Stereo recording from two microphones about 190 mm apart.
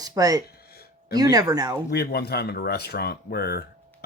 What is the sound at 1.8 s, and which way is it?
Speech, 55° left (ahead or behind).